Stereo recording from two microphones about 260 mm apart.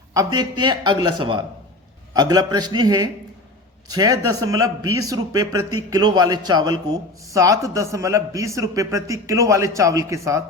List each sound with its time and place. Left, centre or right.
0.1 s a man's voice: centre